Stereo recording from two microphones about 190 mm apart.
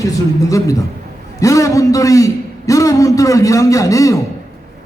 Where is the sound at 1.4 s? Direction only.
15° left (ahead or behind).